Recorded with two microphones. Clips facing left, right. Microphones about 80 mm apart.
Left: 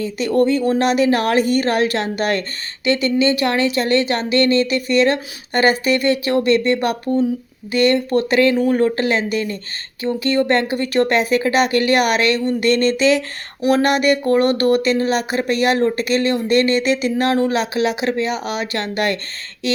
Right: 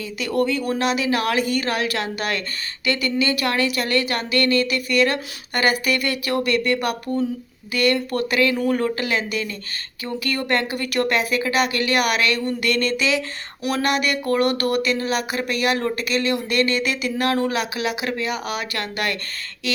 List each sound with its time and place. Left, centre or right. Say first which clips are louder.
0.0 s speech: left 6 dB; left
0.8 s speech: left 5 dB; left
19.6 s a sound: left 5 dB; left